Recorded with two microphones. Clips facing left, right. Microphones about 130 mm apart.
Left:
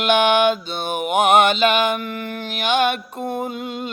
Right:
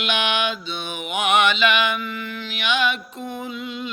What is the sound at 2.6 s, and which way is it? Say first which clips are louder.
Music: left 4 dB; 50° left (ahead or behind).